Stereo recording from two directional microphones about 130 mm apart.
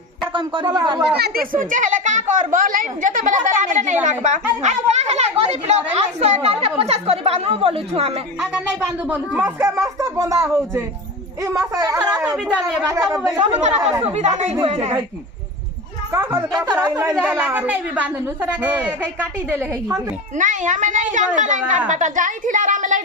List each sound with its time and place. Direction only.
0.3 s speech: 35° right (ahead or behind)
1.5 s a woman's voice: 80° right; by 8.2 s 55° right (ahead or behind)
8.4 s speech: 10° right (ahead or behind); by 13.4 s 25° right (ahead or behind)
13.4 s speech: 60° right (ahead or behind)
16.1 s a woman's voice: 20° right (ahead or behind)
20.3 s a child's voice: 70° right (ahead or behind)